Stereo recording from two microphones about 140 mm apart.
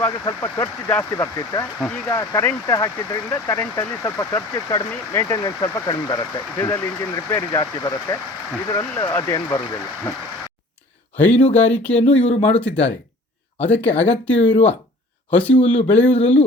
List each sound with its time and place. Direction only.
0.0 s speech: 20° left (ahead or behind)
11.5 s speech: 15° left (ahead or behind)
12.0 s speech: 45° left (ahead or behind)
12.5 s speech: 10° left (ahead or behind)